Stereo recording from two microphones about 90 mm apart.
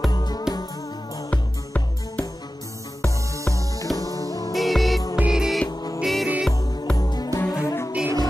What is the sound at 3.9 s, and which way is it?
Music, 40° left (ahead or behind).